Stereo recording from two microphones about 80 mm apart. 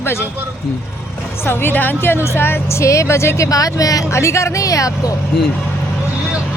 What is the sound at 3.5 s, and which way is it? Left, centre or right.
Speech, left.